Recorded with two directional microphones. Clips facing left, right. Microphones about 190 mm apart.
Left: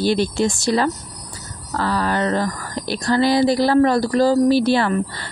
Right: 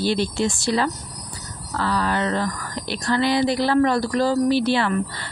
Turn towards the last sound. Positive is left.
turn(degrees=40)  # may be behind; listen again after turning